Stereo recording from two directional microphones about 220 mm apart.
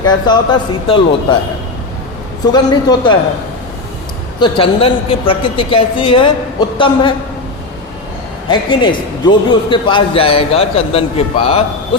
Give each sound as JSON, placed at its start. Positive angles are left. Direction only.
{"t": 0.0, "sound": "a man's voice", "side_deg": 20}
{"t": 2.5, "sound": "a man's voice", "side_deg": 20}
{"t": 4.4, "sound": "a man's voice", "side_deg": 20}
{"t": 8.4, "sound": "a man's voice", "side_deg": 20}